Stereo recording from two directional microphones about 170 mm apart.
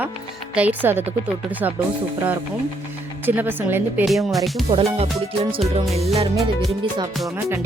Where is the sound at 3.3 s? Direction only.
10° right (ahead or behind).